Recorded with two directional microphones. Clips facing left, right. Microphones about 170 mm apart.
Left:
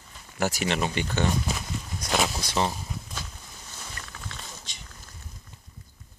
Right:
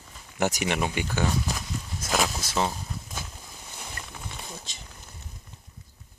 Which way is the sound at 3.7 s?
15° right (ahead or behind).